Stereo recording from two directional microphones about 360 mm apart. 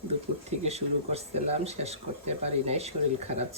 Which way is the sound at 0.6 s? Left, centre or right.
Centre.